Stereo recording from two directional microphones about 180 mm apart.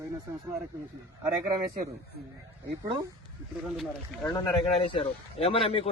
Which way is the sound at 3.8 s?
5° left (ahead or behind).